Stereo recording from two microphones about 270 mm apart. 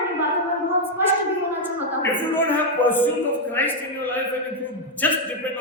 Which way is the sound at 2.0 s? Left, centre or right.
Centre.